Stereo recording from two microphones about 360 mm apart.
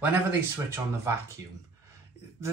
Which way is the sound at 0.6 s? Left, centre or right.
Centre.